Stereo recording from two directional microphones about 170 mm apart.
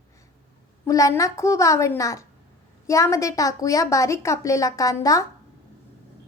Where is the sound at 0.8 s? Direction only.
20° left (ahead or behind).